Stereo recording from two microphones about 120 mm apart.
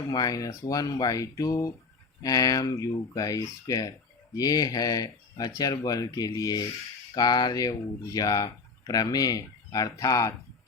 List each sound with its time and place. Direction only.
0.1 s speech: 30° left (ahead or behind)